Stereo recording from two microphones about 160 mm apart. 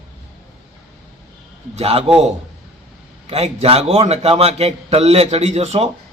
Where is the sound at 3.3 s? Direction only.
40° right (ahead or behind).